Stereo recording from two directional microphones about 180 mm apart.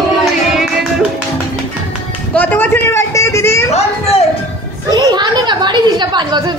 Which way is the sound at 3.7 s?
35° left (ahead or behind).